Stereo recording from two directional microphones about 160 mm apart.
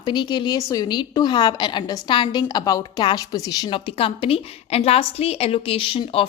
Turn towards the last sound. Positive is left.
turn(degrees=35)  # may be behind; listen again after turning